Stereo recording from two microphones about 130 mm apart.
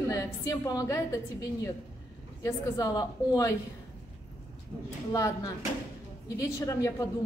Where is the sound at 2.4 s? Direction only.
25° left (ahead or behind).